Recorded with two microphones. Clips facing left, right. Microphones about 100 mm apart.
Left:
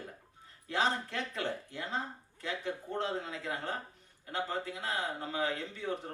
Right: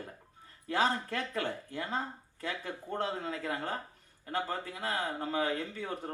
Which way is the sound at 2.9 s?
50° right (ahead or behind).